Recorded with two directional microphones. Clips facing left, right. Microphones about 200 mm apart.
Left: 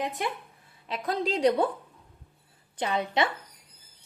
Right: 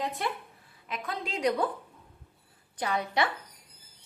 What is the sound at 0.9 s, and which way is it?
Speech, 35° left (ahead or behind).